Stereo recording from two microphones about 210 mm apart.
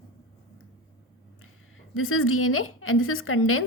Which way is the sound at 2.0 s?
85° left.